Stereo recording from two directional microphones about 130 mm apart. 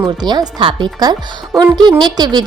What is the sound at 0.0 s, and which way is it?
Speech, 30° right (ahead or behind).